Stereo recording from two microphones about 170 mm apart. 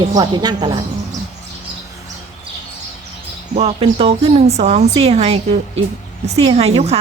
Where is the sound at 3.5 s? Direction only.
35° right (ahead or behind).